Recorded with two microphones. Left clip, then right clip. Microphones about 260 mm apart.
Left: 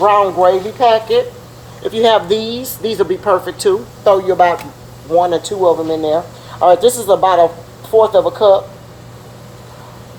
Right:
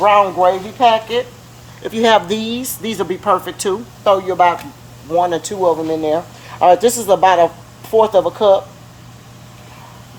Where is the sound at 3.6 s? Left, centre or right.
Right.